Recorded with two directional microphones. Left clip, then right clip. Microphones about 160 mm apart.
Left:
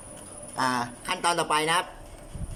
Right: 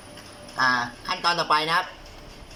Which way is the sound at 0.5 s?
20° left (ahead or behind).